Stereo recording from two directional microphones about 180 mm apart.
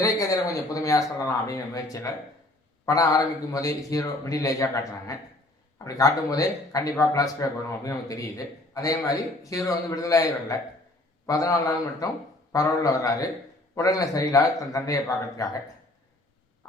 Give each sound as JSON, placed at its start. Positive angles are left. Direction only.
{"t": 0.0, "sound": "a man's voice", "side_deg": 20}